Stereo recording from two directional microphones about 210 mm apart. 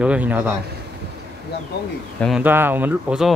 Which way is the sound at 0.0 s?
5° right (ahead or behind).